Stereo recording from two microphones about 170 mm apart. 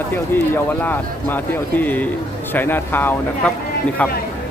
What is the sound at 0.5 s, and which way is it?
Speech, 10° left (ahead or behind).